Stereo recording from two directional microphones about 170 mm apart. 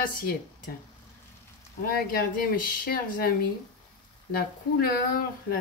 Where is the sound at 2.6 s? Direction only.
55° left (ahead or behind).